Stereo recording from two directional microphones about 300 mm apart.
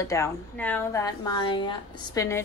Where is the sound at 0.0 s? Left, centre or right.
Centre.